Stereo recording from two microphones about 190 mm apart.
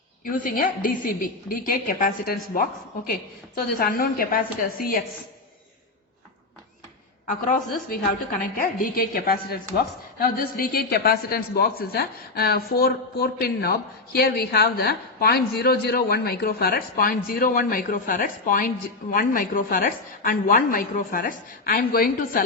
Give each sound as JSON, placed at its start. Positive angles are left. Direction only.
{"t": 0.3, "sound": "a woman's voice", "side_deg": 45}
{"t": 3.8, "sound": "a woman's voice", "side_deg": 50}
{"t": 7.9, "sound": "a woman's voice", "side_deg": 50}